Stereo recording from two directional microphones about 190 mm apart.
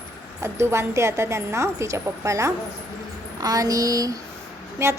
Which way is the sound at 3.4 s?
20° right (ahead or behind).